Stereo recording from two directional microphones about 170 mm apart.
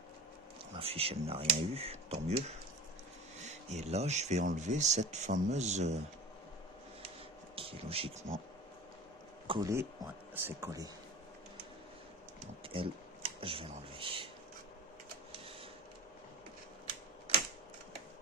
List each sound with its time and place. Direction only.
0.8 s speech: 35° right (ahead or behind)
7.5 s speech: 35° right (ahead or behind)
9.5 s speech: 20° right (ahead or behind)
12.6 s speech: 30° right (ahead or behind)